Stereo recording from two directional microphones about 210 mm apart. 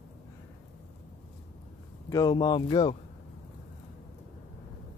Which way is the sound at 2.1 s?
20° left (ahead or behind).